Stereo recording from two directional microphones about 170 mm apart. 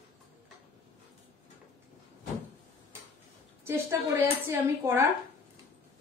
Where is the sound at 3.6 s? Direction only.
15° right (ahead or behind).